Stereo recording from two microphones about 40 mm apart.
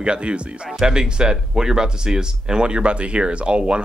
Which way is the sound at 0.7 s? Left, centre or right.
Centre.